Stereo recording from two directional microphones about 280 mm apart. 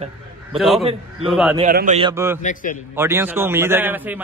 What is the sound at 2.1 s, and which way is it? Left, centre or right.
Speech, centre.